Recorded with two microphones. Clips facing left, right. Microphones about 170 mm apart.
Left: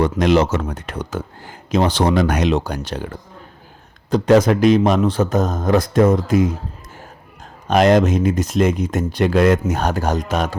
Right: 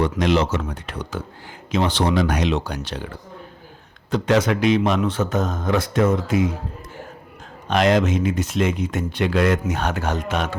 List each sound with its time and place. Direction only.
0.0 s speech: 45° left (ahead or behind)
7.7 s speech: 45° left (ahead or behind)